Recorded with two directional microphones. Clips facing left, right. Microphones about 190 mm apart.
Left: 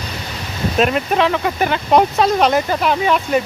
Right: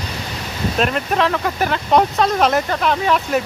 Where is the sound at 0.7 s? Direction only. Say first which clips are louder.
Left 3 dB; 5° left (ahead or behind).